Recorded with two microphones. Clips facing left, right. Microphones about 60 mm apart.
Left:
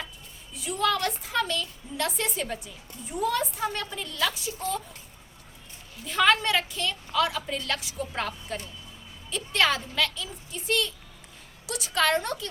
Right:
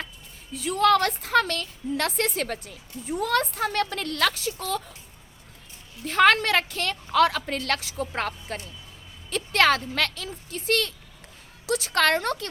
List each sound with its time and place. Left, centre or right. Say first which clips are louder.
0.5 s a woman's voice: right 6 dB; right
6.1 s a woman's voice: right 3 dB; right